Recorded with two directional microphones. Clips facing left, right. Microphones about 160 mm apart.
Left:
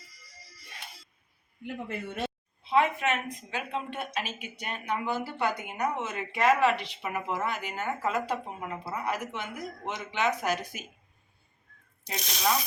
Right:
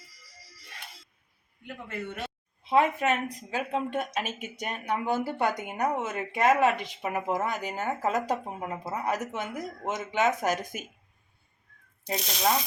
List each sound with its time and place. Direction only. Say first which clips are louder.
1.6 s speech: left 1 dB; 30° left (ahead or behind)
2.6 s speech: right 2 dB; 40° right (ahead or behind)